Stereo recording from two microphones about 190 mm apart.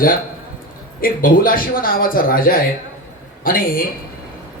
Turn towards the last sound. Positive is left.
turn(degrees=50)  # may be behind; listen again after turning